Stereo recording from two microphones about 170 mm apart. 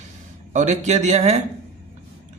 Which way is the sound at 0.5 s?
45° right (ahead or behind).